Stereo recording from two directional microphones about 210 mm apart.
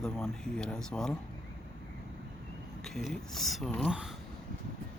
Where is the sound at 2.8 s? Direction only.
Centre (ahead or behind).